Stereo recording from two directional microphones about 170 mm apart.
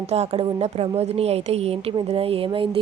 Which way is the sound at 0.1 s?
40° right (ahead or behind).